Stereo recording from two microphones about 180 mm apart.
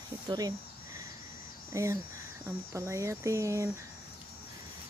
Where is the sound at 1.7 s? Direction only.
15° right (ahead or behind).